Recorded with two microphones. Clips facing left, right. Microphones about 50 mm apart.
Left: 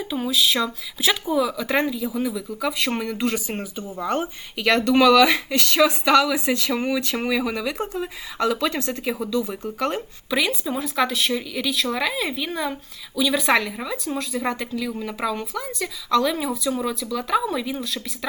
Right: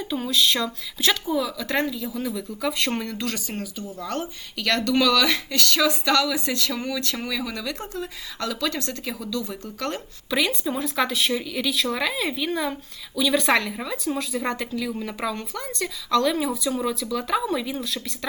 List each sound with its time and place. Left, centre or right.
0.0 s a woman's voice: centre
3.0 s a woman's voice: centre